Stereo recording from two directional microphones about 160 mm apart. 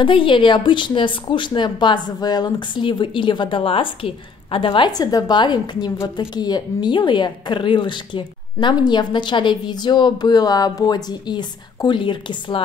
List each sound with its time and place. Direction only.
0.0 s a woman's voice: 30° left (ahead or behind)